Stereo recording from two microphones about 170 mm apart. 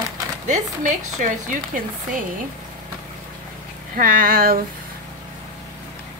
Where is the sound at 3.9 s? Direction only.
55° right (ahead or behind).